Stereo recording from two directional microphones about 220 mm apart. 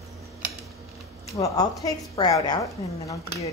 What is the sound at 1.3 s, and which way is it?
A woman's voice, 15° left (ahead or behind).